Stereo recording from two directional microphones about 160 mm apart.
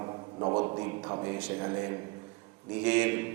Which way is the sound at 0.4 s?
30° right (ahead or behind).